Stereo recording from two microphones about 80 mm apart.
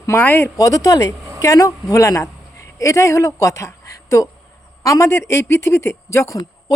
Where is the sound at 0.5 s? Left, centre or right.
Left.